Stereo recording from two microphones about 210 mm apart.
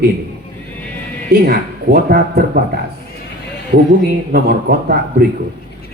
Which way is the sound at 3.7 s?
50° right (ahead or behind).